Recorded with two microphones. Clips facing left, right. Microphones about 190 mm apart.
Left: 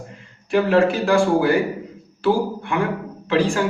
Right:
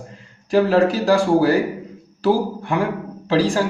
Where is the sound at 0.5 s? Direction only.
35° right (ahead or behind).